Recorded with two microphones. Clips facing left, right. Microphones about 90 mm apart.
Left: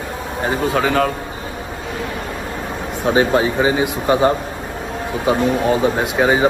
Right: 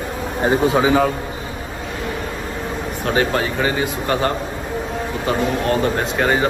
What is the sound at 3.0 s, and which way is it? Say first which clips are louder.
Speech: left 4 dB; 15° left (ahead or behind).